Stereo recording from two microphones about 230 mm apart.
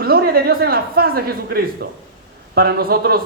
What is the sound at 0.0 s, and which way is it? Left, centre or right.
Speech, right.